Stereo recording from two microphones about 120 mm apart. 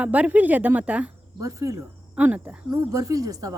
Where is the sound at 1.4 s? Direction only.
25° right (ahead or behind).